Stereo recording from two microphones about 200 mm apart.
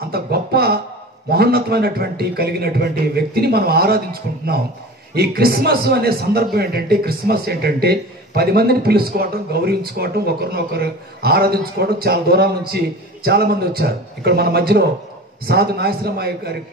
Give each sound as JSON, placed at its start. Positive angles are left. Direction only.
{"t": 0.1, "sound": "music", "side_deg": -50}
{"t": 1.3, "sound": "a man's voice", "side_deg": -50}